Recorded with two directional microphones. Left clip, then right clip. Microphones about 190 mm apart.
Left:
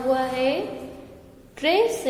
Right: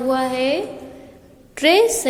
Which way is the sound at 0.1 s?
35° right (ahead or behind).